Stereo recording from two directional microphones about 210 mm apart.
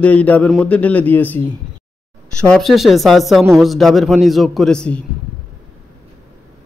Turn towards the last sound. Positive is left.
turn(degrees=5)  # may be behind; listen again after turning